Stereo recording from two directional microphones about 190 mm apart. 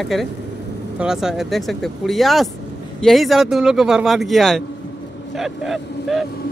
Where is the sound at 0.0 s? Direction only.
Centre (ahead or behind).